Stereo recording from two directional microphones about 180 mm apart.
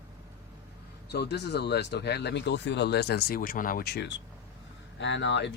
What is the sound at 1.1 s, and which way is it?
Speech, 65° left (ahead or behind).